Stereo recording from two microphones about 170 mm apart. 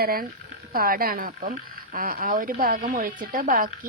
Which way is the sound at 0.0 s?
60° right (ahead or behind).